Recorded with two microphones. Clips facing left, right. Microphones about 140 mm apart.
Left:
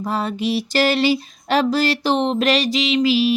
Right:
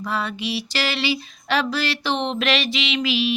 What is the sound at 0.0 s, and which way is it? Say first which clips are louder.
Music: left 4 dB; 40° left (ahead or behind).